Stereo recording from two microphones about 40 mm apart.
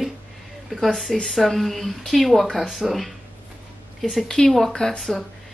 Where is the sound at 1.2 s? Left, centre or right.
Centre.